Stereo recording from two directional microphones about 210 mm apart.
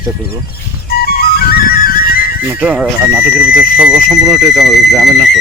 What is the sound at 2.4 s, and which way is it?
Speech, 5° right (ahead or behind).